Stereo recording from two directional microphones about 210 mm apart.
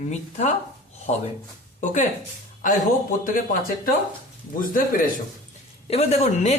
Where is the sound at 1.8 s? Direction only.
35° left (ahead or behind).